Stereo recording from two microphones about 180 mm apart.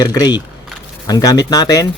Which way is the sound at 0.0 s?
20° left (ahead or behind).